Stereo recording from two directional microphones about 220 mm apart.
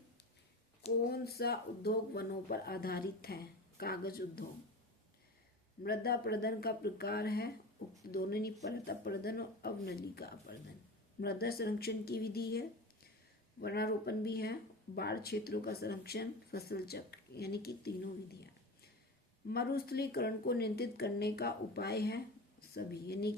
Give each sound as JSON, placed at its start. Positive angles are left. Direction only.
{"t": 1.1, "sound": "speech", "side_deg": 45}
{"t": 5.8, "sound": "speech", "side_deg": 45}